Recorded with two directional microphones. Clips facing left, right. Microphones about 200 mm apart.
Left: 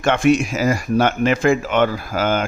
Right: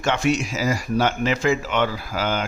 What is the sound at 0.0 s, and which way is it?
A man's voice, 55° left (ahead or behind).